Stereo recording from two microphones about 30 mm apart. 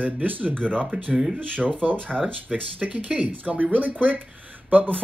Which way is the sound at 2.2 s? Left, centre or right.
Right.